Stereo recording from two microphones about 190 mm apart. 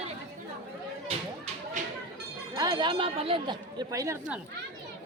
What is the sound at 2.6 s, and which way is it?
Speech, 20° right (ahead or behind).